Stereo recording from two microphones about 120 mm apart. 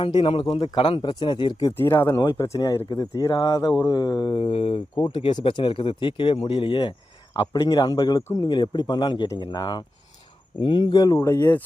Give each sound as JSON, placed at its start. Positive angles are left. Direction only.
{"t": 0.0, "sound": "a man's voice", "side_deg": 45}
{"t": 2.6, "sound": "a man's voice", "side_deg": 30}
{"t": 4.9, "sound": "speech", "side_deg": 40}
{"t": 7.5, "sound": "a man's voice", "side_deg": 30}
{"t": 11.0, "sound": "speech", "side_deg": 25}